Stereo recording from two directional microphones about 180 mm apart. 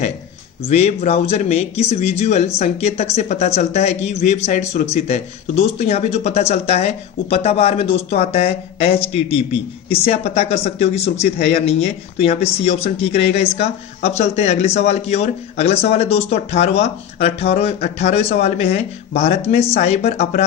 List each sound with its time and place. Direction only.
0.7 s speech: 35° left (ahead or behind)